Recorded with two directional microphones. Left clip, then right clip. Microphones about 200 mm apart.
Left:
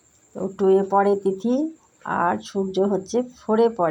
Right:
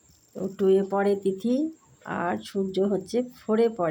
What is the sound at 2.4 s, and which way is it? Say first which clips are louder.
Speech: left 4 dB; 5° right (ahead or behind).